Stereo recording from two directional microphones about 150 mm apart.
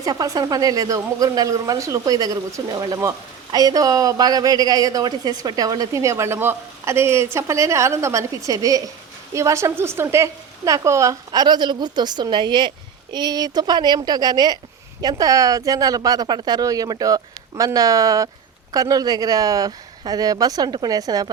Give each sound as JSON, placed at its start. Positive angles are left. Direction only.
{"t": 0.0, "sound": "a woman's voice", "side_deg": -25}